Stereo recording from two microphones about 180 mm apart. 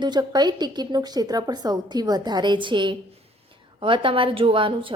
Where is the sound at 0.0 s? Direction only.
25° right (ahead or behind).